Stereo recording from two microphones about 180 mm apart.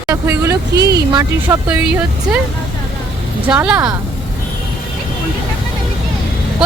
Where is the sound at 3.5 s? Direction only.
5° right (ahead or behind).